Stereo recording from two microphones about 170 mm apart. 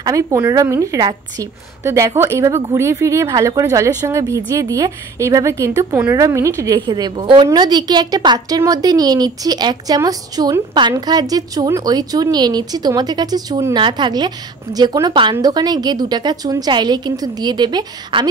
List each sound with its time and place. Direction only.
0.0 s a woman's voice: 20° right (ahead or behind)